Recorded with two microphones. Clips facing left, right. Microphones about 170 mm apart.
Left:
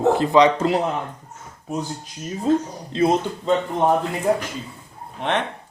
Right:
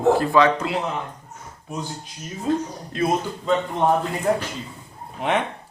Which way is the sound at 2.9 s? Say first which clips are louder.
Left 4 dB; 25° left (ahead or behind).